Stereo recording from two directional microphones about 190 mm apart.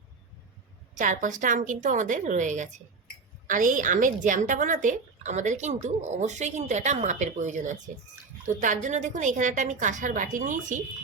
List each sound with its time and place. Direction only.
0.9 s a woman's voice: 40° right (ahead or behind)